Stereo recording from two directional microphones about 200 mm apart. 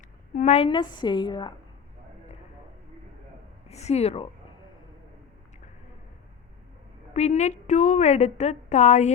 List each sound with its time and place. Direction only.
0.3 s a woman's voice: 35° left (ahead or behind)
3.7 s speech: 35° left (ahead or behind)
7.1 s a woman's voice: 35° left (ahead or behind)